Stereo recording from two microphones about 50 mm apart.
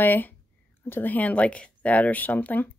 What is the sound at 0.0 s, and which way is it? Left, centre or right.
Speech, left.